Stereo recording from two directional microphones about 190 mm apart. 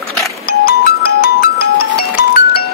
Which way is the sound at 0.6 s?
55° left (ahead or behind).